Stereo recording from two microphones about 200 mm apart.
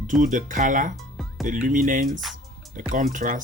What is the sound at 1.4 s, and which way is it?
Speech, 40° right (ahead or behind).